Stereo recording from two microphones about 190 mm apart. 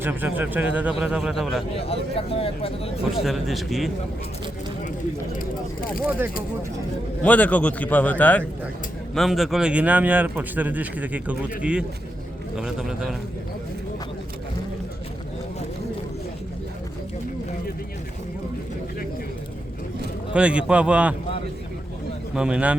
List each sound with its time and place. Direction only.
0.0 s speech: 10° right (ahead or behind)
1.8 s speech: 30° left (ahead or behind)
3.2 s speech: centre (ahead or behind)
7.2 s a man's voice: 5° left (ahead or behind)
20.3 s speech: 5° right (ahead or behind)
22.4 s speech: 5° right (ahead or behind)